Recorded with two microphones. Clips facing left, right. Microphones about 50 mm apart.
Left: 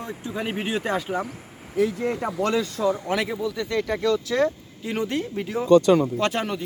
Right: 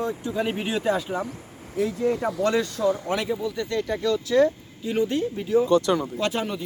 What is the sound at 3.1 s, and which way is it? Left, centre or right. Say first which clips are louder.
Speech: left 1 dB; left.